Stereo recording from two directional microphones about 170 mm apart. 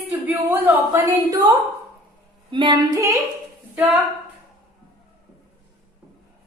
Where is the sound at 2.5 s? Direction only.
30° right (ahead or behind).